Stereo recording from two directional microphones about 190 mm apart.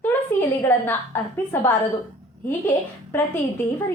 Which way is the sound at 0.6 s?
10° left (ahead or behind).